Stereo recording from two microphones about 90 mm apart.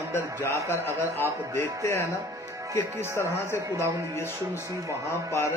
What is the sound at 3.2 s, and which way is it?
Speech, 30° left (ahead or behind).